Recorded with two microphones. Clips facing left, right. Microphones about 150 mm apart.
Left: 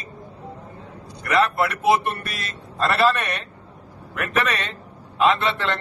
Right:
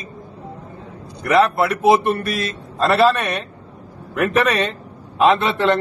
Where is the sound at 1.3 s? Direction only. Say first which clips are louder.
Right 5 dB; 35° right (ahead or behind).